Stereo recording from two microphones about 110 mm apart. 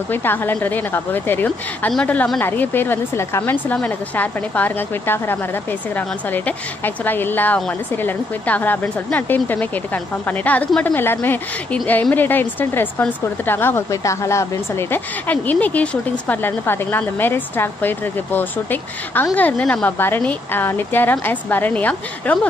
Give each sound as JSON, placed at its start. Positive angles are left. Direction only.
{"t": 0.1, "sound": "a woman's voice", "side_deg": 20}